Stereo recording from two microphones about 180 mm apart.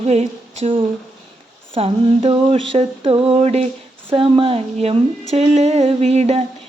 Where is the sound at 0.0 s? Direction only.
35° right (ahead or behind).